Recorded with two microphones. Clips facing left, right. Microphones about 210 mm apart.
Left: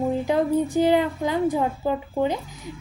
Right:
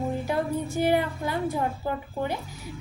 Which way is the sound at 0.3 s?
15° left (ahead or behind).